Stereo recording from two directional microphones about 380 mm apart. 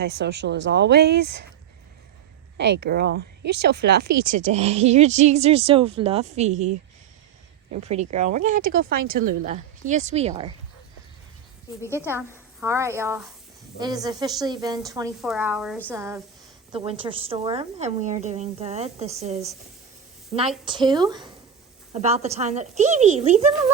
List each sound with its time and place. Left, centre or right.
0.0 s speech: right
2.6 s speech: right
7.8 s speech: centre
11.8 s speech: centre